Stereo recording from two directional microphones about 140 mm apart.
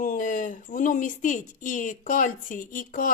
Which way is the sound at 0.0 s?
70° left (ahead or behind).